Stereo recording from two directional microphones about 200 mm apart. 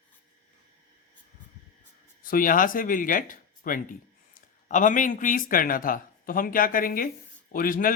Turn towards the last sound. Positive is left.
turn(degrees=45)  # may be behind; listen again after turning